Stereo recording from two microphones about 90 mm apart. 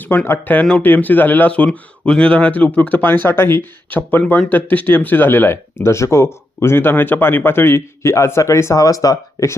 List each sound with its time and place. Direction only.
0.0 s speech: 20° left (ahead or behind); by 9.6 s 40° left (ahead or behind)